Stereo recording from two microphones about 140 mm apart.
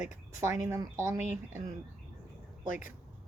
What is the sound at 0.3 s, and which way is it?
Speech, 20° right (ahead or behind).